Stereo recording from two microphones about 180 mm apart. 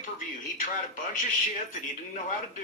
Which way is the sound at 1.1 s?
45° left (ahead or behind).